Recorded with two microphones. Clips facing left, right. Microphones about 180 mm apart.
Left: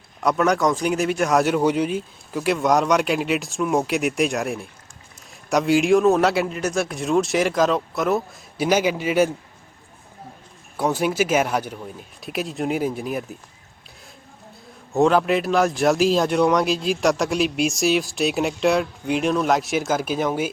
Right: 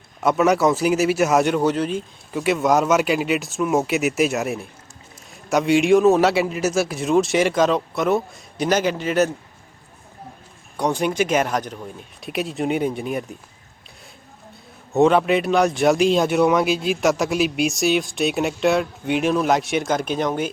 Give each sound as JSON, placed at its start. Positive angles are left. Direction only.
{"t": 0.2, "sound": "speech", "side_deg": -5}
{"t": 10.8, "sound": "speech", "side_deg": 5}
{"t": 14.9, "sound": "speech", "side_deg": 0}